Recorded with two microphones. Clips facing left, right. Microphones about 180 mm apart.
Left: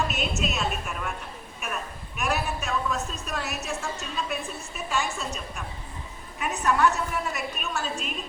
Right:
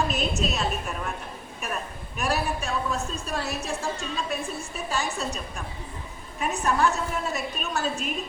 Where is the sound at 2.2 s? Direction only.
35° right (ahead or behind).